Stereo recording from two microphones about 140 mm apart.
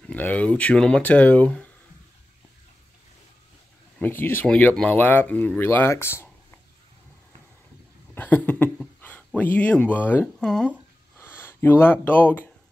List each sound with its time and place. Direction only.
0.1 s speech: 10° left (ahead or behind)
4.0 s speech: 15° left (ahead or behind)
8.1 s speech: 10° left (ahead or behind)